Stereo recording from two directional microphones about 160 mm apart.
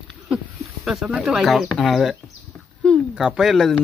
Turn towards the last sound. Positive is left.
turn(degrees=0)  # may be behind; listen again after turning